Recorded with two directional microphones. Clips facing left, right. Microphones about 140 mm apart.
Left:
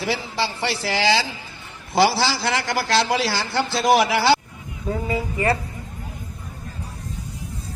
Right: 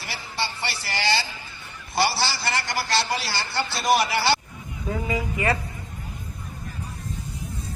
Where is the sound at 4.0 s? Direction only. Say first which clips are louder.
Left 5 dB; 90° left.